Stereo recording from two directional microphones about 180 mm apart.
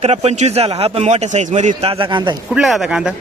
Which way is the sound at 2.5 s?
Centre (ahead or behind).